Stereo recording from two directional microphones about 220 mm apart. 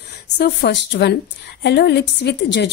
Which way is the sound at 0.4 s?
50° left (ahead or behind).